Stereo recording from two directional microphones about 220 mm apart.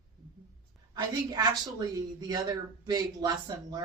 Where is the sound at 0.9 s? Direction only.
20° right (ahead or behind).